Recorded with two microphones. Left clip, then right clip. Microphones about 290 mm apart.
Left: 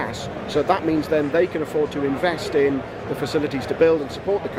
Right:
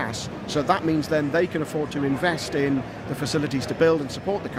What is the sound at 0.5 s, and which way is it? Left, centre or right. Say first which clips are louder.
Speech: left 2 dB; right.